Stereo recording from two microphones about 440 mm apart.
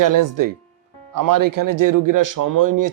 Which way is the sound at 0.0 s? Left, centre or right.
Right.